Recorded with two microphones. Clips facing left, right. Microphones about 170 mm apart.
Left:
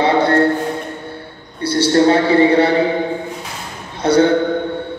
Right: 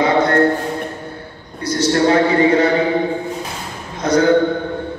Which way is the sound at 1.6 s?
30° left (ahead or behind).